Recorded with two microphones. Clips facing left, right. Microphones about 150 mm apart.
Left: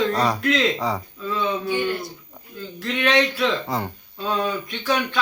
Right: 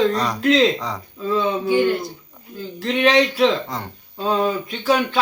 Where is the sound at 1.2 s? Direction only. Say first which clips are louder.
Right 6 dB; 35° right (ahead or behind).